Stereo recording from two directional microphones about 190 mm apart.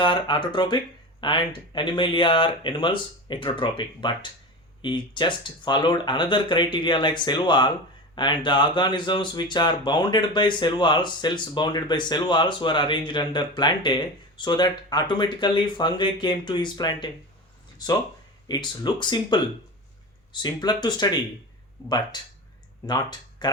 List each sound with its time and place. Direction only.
0.0 s speech: 25° left (ahead or behind)
18.4 s speech: 20° left (ahead or behind)